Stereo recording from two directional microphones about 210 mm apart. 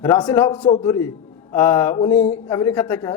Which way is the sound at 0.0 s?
15° left (ahead or behind).